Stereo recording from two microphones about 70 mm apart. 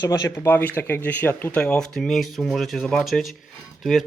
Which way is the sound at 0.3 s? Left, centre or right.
Left.